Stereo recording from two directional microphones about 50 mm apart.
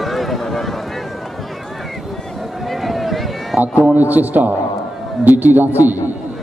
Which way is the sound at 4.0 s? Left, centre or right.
Right.